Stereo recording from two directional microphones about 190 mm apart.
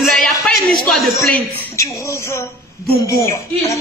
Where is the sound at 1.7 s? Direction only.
15° left (ahead or behind).